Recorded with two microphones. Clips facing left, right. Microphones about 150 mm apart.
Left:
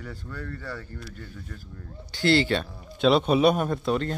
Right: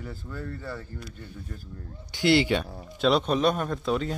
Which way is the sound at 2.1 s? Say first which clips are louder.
Even; 15° right (ahead or behind).